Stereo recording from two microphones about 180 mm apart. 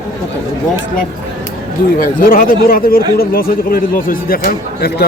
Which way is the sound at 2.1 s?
50° left (ahead or behind).